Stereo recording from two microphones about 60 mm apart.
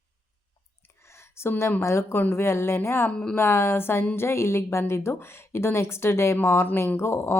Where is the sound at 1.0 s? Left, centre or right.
Left.